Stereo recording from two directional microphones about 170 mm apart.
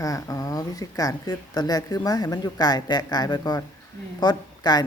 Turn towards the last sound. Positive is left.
turn(degrees=25)  # may be behind; listen again after turning